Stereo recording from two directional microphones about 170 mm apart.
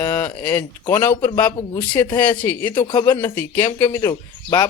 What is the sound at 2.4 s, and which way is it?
Speech, 10° left (ahead or behind).